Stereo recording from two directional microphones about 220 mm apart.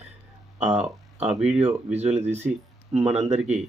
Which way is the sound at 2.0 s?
30° right (ahead or behind).